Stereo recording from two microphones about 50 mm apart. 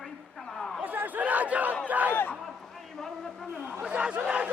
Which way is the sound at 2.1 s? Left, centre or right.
Left.